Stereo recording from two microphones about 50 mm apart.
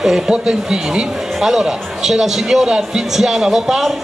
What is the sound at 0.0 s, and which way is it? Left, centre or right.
Speech, centre.